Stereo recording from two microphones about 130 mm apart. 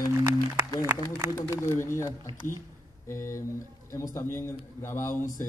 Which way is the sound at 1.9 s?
20° left (ahead or behind).